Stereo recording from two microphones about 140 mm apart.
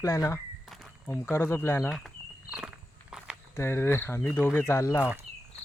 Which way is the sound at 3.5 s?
20° left (ahead or behind).